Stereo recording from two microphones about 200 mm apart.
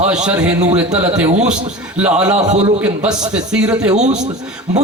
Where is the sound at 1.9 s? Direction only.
5° right (ahead or behind).